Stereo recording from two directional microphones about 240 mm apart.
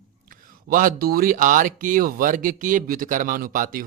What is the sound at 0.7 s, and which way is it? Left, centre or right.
Speech, right.